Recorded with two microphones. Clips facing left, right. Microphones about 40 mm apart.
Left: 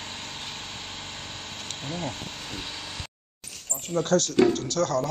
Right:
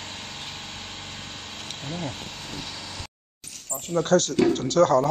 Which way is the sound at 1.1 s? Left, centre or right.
Centre.